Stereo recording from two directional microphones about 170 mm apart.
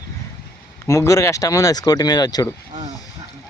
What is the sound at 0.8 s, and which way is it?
Speech, 15° left (ahead or behind).